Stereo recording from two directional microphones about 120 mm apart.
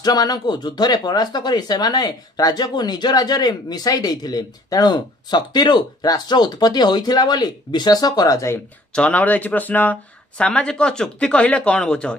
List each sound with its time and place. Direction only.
0.0 s speech: 35° left (ahead or behind)
8.9 s speech: 10° left (ahead or behind)